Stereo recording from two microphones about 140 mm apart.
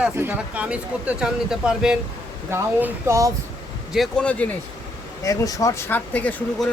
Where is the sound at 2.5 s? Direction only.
15° right (ahead or behind).